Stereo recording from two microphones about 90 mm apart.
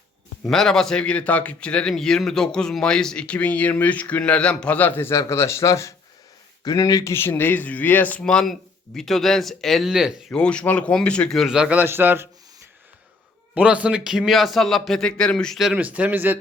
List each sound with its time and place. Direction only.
0.4 s a man's voice: 5° left (ahead or behind); by 5.9 s 35° left (ahead or behind)
6.7 s speech: 45° left (ahead or behind)
7.1 s speech: 25° left (ahead or behind)
8.2 s a man's voice: 10° left (ahead or behind); by 10.3 s 5° right (ahead or behind)
10.3 s a man's voice: 10° left (ahead or behind)
11.4 s speech: 10° right (ahead or behind)
11.8 s a man's voice: 25° right (ahead or behind)
13.5 s a man's voice: 15° right (ahead or behind); by 15.7 s 5° left (ahead or behind)
15.7 s speech: 15° right (ahead or behind)